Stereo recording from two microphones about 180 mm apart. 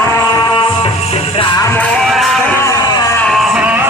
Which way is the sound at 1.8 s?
5° left (ahead or behind).